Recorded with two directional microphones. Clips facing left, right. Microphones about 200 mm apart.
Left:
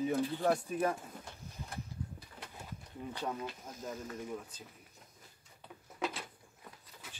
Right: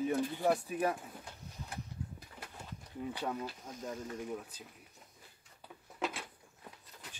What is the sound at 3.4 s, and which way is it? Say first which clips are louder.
Speech: right 1 dB; centre (ahead or behind).